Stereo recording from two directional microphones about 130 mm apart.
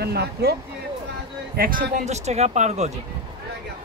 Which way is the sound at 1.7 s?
60° right (ahead or behind).